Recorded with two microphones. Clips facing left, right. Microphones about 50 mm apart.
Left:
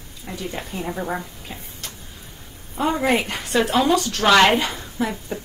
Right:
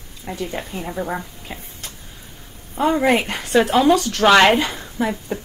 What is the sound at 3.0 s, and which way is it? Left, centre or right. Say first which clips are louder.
Speech: right 3 dB; right.